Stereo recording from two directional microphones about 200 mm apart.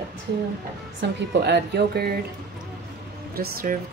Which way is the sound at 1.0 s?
60° right (ahead or behind).